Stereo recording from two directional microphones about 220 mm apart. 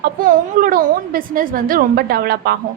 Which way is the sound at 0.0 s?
40° right (ahead or behind).